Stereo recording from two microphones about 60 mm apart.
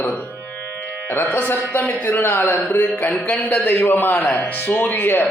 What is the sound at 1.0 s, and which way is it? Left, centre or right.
A man's voice, left.